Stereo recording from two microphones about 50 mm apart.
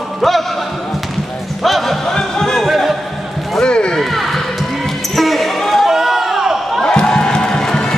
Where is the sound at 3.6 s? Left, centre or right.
Centre.